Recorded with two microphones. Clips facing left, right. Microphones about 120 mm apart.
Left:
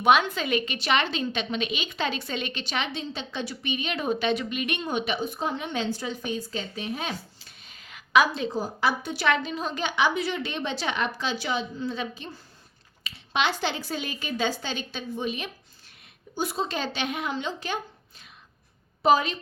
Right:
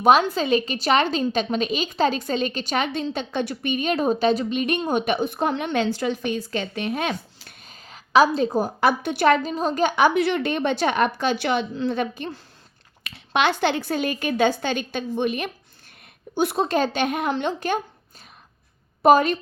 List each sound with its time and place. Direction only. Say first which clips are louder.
0.0 s a woman's voice: right 4 dB; 40° right (ahead or behind); by 7.5 s 65° right (ahead or behind)
7.6 s a sound: right 3 dB; 40° right (ahead or behind)
8.5 s speech: right 6 dB; 60° right (ahead or behind)
9.2 s a woman's voice: right 7 dB; 40° right (ahead or behind)
19.0 s a woman's voice: right 6 dB; 50° right (ahead or behind)